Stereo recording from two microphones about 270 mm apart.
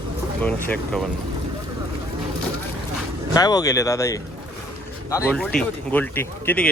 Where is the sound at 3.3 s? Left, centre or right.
Centre.